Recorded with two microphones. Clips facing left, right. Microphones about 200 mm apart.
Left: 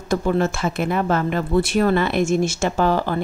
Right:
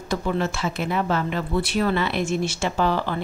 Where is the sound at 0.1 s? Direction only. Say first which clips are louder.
Left 5 dB; 50° left (ahead or behind).